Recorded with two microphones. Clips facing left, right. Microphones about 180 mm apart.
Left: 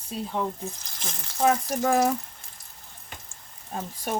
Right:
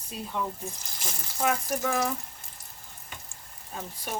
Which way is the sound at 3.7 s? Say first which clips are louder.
Left 5 dB; 45° left (ahead or behind).